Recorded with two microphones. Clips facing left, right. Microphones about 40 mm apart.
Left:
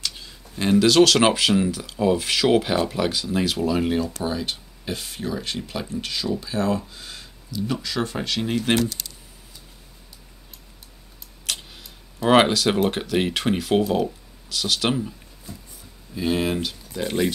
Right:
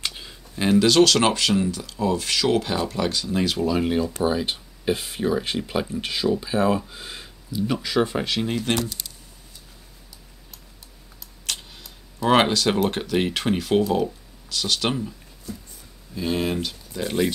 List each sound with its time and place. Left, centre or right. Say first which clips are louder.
0.0 s a sound: right 1 dB; centre
0.6 s speech: left 1 dB; centre
4.2 s speech: right 4 dB; centre
11.4 s speech: left 1 dB; centre